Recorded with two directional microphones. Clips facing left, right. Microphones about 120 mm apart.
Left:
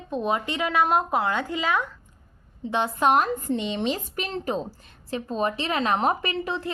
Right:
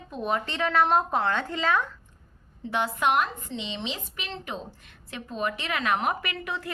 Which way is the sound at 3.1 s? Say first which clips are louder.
Left 5 dB; 40° left (ahead or behind).